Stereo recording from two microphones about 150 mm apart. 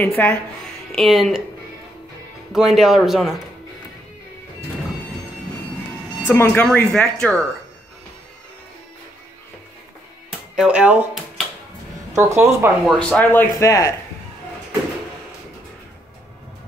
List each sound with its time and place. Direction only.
0.0 s speech: 10° left (ahead or behind)
0.9 s a man's voice: centre (ahead or behind)
2.5 s a man's voice: centre (ahead or behind)
6.2 s speech: 15° left (ahead or behind)
10.5 s speech: 5° right (ahead or behind)
12.1 s speech: 20° right (ahead or behind)
12.8 s speech: 10° left (ahead or behind)